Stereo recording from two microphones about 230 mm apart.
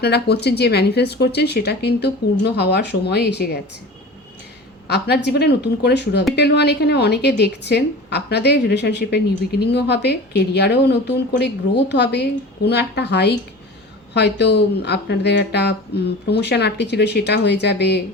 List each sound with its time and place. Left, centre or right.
0.0 s a woman's voice: left
4.9 s a woman's voice: left